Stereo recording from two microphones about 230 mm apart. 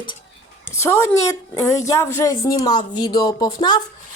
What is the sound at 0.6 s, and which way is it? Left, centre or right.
A woman's voice, centre.